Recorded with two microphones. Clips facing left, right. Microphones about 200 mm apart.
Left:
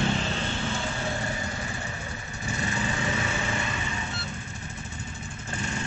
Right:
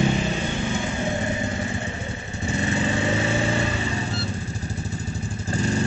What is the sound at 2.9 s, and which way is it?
Vehicle, 30° right (ahead or behind).